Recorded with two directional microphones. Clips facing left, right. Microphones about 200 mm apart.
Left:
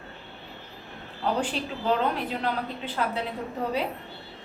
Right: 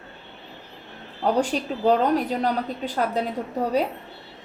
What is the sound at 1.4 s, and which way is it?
A woman's voice, 40° right (ahead or behind).